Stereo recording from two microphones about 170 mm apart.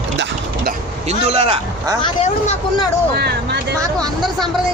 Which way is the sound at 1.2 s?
40° right (ahead or behind).